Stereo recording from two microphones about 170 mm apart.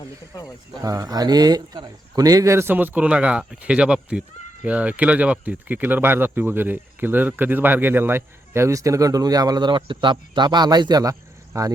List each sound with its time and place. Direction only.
0.8 s speech: 20° right (ahead or behind)